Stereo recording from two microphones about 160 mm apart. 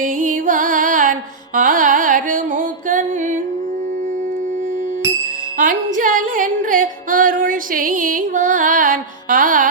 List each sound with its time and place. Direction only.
0.0 s music: 55° right (ahead or behind)
1.5 s carnatic music: 55° right (ahead or behind)
5.5 s music: 55° right (ahead or behind)